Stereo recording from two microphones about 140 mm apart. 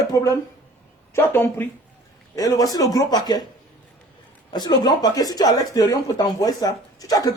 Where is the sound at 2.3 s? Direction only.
25° left (ahead or behind).